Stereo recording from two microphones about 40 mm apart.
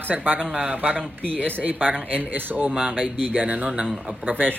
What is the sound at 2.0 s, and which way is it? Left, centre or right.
Speech, right.